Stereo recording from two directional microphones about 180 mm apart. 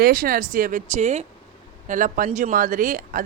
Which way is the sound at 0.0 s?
55° right (ahead or behind).